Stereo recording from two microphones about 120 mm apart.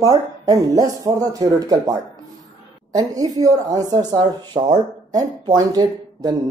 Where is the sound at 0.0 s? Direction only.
30° right (ahead or behind).